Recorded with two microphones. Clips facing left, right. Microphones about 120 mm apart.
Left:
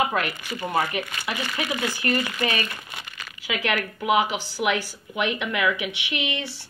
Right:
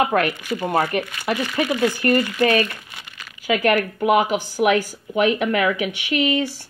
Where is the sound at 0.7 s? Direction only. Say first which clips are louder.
Right 3 dB; 45° right (ahead or behind).